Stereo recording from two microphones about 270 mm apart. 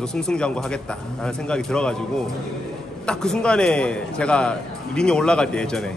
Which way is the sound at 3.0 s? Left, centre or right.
Centre.